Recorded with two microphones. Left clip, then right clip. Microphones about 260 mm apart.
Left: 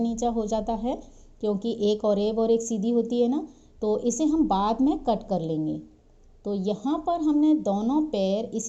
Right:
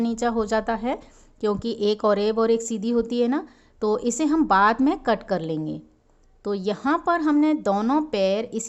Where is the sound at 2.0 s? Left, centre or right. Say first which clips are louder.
Right 3 dB; right.